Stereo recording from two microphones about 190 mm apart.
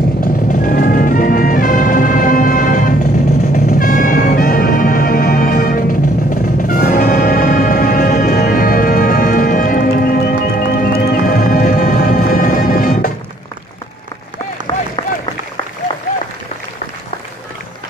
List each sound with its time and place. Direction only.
0.2 s music: 45° left (ahead or behind)